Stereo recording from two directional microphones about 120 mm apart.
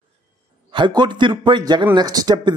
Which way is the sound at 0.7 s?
40° right (ahead or behind).